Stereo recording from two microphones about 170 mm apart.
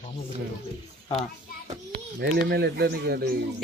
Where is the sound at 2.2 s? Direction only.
75° right (ahead or behind).